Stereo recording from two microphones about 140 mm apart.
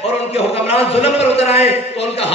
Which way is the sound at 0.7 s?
45° left (ahead or behind).